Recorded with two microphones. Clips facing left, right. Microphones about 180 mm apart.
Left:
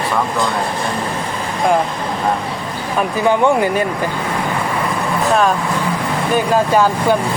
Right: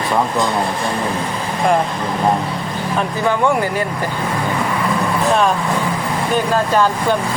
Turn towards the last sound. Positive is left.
turn(degrees=10)  # may be behind; listen again after turning